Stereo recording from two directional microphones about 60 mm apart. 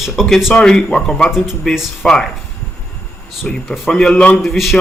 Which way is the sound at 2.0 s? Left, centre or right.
Left.